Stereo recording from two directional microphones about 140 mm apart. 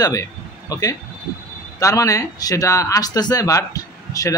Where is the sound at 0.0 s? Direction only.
25° left (ahead or behind).